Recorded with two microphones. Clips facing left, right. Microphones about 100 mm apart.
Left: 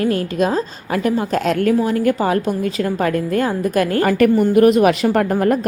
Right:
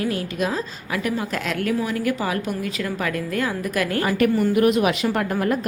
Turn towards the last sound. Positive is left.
turn(degrees=40)  # may be behind; listen again after turning